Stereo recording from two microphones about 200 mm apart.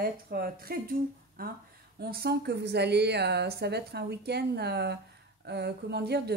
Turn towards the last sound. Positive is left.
turn(degrees=-55)  # may be behind; listen again after turning